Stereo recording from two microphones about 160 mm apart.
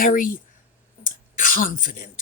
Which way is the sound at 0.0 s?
60° left (ahead or behind).